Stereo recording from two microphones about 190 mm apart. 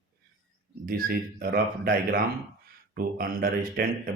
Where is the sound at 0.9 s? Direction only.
50° right (ahead or behind).